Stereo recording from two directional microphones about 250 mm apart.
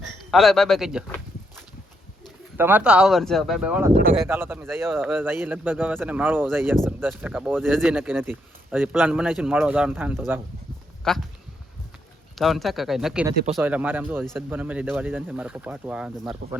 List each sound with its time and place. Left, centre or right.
0.3 s speech: centre
2.6 s speech: centre
3.9 s speech: right
4.3 s a man's voice: centre
11.0 s speech: centre
12.4 s a man's voice: centre